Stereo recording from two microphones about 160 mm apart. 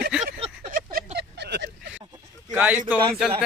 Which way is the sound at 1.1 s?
90° right.